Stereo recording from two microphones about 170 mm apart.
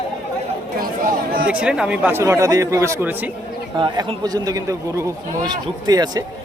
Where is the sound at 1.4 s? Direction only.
5° right (ahead or behind).